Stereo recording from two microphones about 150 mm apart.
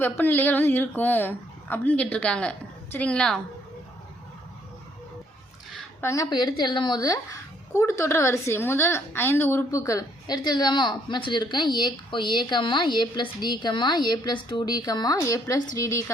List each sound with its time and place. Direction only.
0.0 s a woman's voice: 15° left (ahead or behind)
6.0 s a woman's voice: 20° left (ahead or behind)
6.3 s a woman's voice: 30° left (ahead or behind)